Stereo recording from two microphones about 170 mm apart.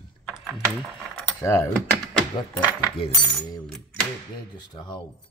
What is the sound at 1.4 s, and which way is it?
Speech, 15° left (ahead or behind).